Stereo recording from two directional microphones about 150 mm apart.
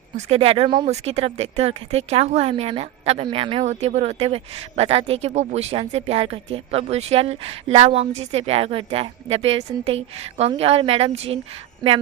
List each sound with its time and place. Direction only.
0.3 s speech: 40° right (ahead or behind)